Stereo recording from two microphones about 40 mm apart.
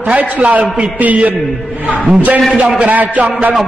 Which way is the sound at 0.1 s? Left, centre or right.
Right.